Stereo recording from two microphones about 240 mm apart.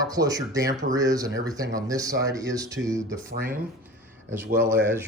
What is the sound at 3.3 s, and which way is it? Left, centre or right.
Speech, right.